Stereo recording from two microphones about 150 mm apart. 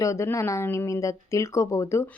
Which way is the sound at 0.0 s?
20° left (ahead or behind).